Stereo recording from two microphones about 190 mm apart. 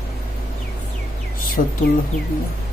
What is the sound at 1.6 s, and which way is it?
Speech, 45° left (ahead or behind).